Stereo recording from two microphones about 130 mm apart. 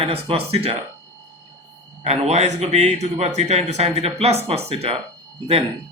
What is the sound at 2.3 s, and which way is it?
Speech, 60° right (ahead or behind).